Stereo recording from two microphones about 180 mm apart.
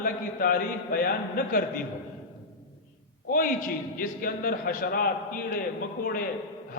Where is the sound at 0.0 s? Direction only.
55° left (ahead or behind).